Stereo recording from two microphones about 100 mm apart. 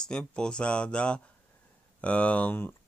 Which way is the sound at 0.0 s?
10° left (ahead or behind).